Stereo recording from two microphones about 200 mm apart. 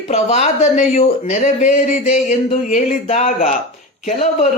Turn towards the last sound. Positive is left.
turn(degrees=35)  # may be behind; listen again after turning